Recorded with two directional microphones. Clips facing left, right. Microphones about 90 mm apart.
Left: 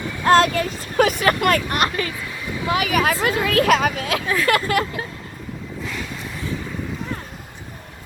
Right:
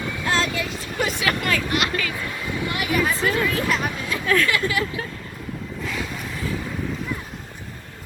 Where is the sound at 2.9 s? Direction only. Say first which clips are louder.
Right 1 dB; 85° left.